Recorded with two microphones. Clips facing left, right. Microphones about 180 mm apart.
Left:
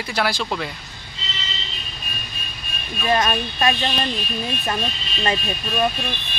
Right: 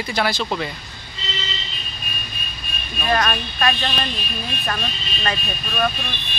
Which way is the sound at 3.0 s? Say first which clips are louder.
Left 1 dB; 25° left (ahead or behind).